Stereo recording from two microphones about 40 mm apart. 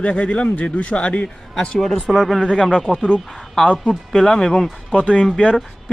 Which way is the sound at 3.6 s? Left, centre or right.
Left.